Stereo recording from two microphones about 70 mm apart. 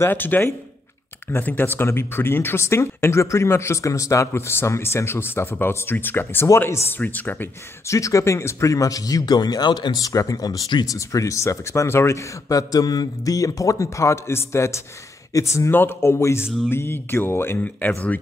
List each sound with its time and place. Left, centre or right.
0.0 s speech: left
4.3 s speech: left
7.8 s speech: left
10.9 s speech: left
15.7 s speech: left
17.6 s speech: left